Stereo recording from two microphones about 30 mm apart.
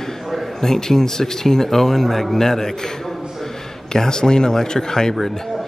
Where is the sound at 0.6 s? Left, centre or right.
Centre.